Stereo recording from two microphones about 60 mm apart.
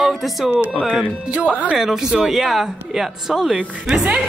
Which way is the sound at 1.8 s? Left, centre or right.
Centre.